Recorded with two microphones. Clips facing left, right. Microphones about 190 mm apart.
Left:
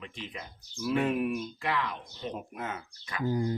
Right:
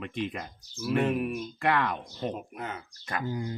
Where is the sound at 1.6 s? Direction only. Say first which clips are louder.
Right 5 dB; 60° right (ahead or behind).